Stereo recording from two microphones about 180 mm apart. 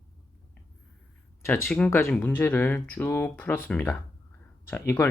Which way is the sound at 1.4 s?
10° left (ahead or behind).